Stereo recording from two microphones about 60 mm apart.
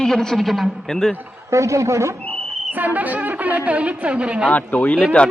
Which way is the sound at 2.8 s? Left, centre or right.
Right.